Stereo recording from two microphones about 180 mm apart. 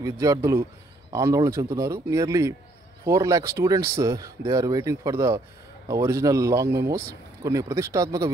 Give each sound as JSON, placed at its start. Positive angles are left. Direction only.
{"t": 0.0, "sound": "speech", "side_deg": -20}